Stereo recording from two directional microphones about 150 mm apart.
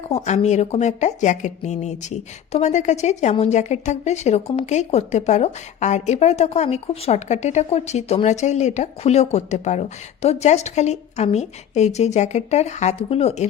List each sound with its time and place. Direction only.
0.1 s speech: 50° left (ahead or behind)